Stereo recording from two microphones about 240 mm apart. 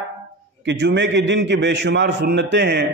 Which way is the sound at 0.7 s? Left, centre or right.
Right.